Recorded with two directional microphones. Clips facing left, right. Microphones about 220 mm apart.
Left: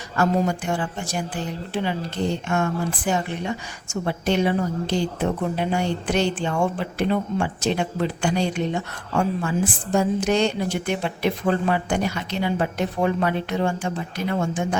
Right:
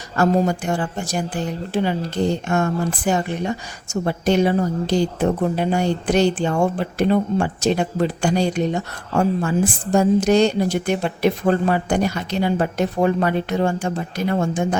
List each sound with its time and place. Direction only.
0.2 s a woman's voice: 40° right (ahead or behind)